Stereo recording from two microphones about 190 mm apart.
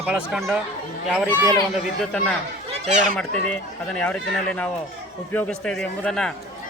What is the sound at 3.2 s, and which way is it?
Speech, 5° left (ahead or behind).